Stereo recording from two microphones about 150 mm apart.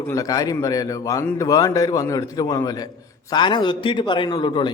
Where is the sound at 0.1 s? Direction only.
25° left (ahead or behind).